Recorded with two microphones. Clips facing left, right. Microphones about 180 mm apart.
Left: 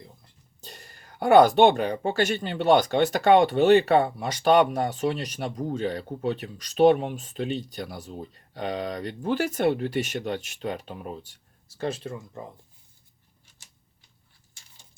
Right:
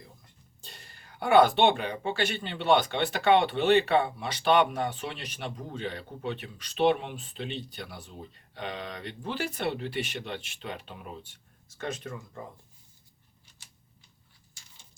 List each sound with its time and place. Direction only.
0.6 s speech: 40° left (ahead or behind); by 12.5 s 25° left (ahead or behind)